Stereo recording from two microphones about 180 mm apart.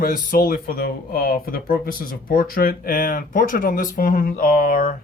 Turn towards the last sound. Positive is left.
turn(degrees=50)  # may be behind; listen again after turning